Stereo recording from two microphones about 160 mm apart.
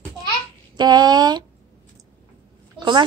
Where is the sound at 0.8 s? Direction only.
25° right (ahead or behind).